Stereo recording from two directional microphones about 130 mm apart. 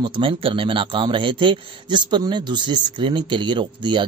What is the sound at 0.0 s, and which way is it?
Speech, 40° right (ahead or behind).